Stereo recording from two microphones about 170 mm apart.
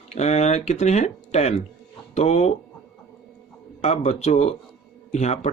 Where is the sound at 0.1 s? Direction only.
40° left (ahead or behind).